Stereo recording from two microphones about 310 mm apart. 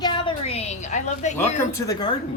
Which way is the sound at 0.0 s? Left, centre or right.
Centre.